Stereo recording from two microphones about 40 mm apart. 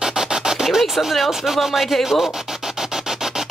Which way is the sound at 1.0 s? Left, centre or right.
Centre.